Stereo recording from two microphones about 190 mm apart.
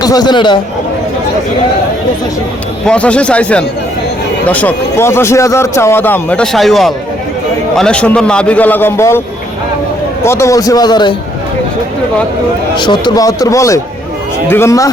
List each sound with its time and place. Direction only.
0.0 s speech: 20° left (ahead or behind)
2.8 s a man's voice: 5° left (ahead or behind)
10.2 s speech: 15° left (ahead or behind)
12.7 s a man's voice: 25° left (ahead or behind)